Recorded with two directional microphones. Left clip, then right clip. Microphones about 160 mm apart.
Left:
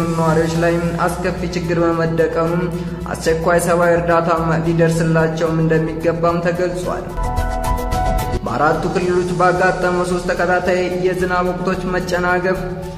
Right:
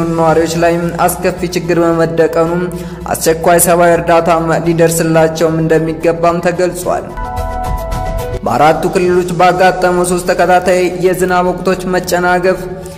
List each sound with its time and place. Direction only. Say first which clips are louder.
0.1 s a man's voice: right 8 dB; 35° right (ahead or behind)
8.5 s a man's voice: right 8 dB; 40° right (ahead or behind)